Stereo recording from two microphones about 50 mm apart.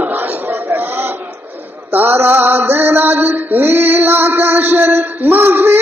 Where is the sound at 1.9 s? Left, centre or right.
Right.